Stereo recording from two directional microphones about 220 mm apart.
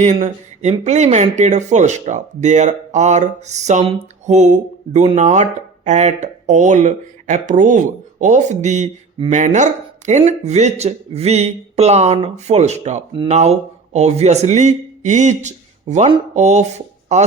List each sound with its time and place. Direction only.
0.0 s speech: 30° right (ahead or behind)